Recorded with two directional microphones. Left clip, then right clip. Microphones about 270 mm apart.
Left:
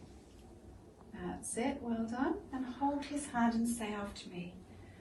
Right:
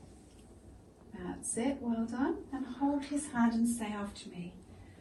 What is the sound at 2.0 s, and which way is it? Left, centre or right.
Speech, left.